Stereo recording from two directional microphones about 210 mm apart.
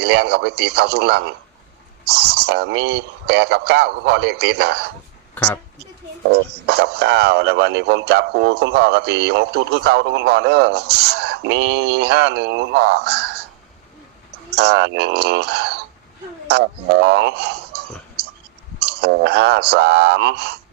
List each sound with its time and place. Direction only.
0.0 s speech: 50° right (ahead or behind)
5.3 s a woman's voice: 10° left (ahead or behind)
6.5 s speech: 50° right (ahead or behind)
14.5 s speech: 55° right (ahead or behind)